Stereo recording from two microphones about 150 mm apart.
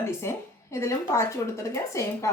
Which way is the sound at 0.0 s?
15° left (ahead or behind).